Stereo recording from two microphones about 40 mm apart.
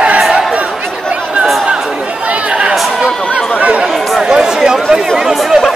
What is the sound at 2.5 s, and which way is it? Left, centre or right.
Chatter, centre.